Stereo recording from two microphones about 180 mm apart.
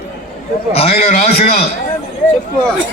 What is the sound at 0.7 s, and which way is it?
Speech, 35° left (ahead or behind).